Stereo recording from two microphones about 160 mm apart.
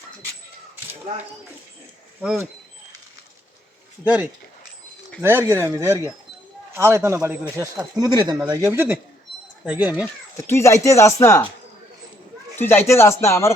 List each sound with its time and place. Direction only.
4.0 s speech: 10° right (ahead or behind); by 8.4 s 25° right (ahead or behind)
8.7 s speech: 15° right (ahead or behind)
10.3 s speech: 15° left (ahead or behind)
12.5 s speech: 15° left (ahead or behind)